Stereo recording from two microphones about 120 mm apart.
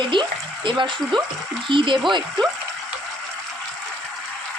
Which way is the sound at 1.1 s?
40° right (ahead or behind).